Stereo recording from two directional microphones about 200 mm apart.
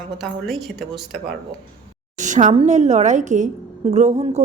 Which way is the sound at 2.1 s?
40° right (ahead or behind).